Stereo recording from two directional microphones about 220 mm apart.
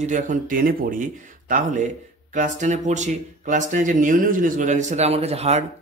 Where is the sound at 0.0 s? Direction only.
35° right (ahead or behind).